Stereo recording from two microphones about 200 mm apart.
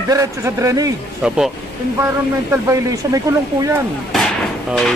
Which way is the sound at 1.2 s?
5° right (ahead or behind).